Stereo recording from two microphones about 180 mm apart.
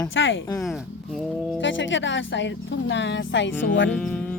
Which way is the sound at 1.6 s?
90° left.